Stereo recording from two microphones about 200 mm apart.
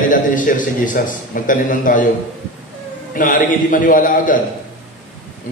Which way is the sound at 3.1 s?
45° left (ahead or behind).